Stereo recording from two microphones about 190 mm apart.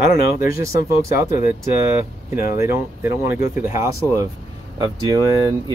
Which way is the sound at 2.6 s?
15° right (ahead or behind).